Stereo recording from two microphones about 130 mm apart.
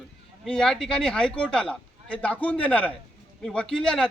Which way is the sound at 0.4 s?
5° left (ahead or behind).